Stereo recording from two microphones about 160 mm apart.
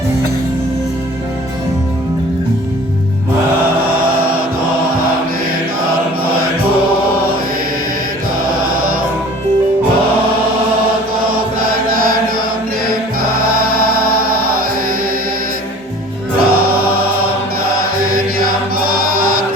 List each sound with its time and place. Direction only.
11.9 s chant: 65° right (ahead or behind)
16.4 s music: 70° right (ahead or behind)
18.1 s chant: 65° right (ahead or behind)
18.9 s music: 65° right (ahead or behind)